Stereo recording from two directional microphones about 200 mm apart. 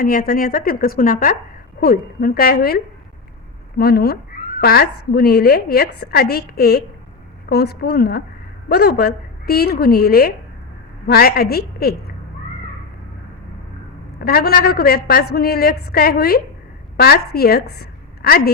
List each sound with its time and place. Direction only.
0.0 s a woman's voice: 45° left (ahead or behind)
3.8 s a woman's voice: 50° left (ahead or behind)
14.2 s a woman's voice: 50° left (ahead or behind)